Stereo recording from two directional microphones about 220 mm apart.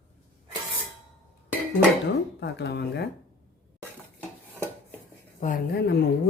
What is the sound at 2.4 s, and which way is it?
Speech, 50° left (ahead or behind).